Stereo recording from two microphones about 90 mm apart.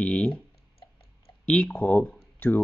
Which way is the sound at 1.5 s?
10° left (ahead or behind).